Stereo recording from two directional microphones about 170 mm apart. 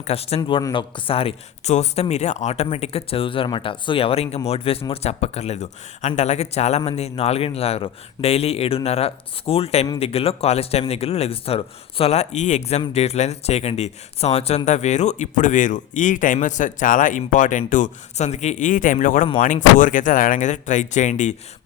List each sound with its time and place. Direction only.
0.0 s speech: 35° left (ahead or behind)